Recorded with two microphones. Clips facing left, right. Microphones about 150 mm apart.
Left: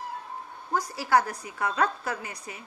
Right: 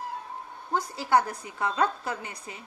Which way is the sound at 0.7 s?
25° right (ahead or behind).